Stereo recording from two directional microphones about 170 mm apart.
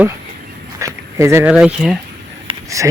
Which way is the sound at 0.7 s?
15° right (ahead or behind).